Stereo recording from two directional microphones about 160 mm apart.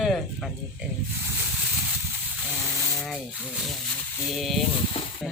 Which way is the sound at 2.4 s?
5° right (ahead or behind).